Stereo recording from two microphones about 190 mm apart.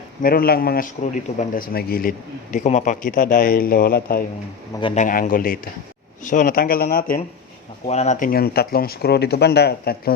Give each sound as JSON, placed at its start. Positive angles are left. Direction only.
{"t": 0.2, "sound": "a man's voice", "side_deg": 50}
{"t": 7.9, "sound": "a man's voice", "side_deg": 35}